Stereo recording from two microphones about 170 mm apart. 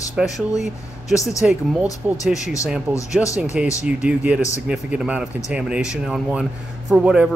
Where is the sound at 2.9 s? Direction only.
10° right (ahead or behind).